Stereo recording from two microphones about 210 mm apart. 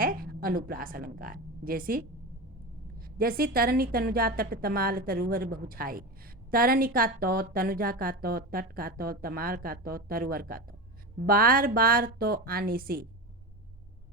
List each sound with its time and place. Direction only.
0.0 s a woman's voice: 45° right (ahead or behind)
3.2 s a woman's voice: 45° right (ahead or behind)